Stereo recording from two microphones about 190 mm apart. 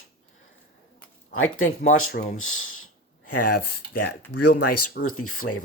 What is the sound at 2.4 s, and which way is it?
Speech, 90° left.